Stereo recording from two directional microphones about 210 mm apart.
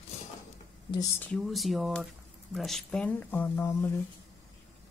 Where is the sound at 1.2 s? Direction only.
Centre (ahead or behind).